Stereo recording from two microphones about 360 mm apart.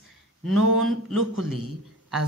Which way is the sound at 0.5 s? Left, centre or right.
Right.